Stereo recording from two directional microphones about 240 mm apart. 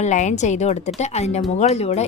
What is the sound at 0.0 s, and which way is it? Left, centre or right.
A woman's voice, left.